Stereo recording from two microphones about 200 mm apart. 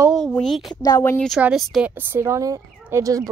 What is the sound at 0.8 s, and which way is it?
Speech, 20° left (ahead or behind).